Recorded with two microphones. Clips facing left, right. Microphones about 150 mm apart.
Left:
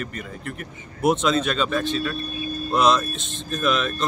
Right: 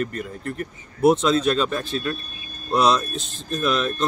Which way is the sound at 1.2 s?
Centre (ahead or behind).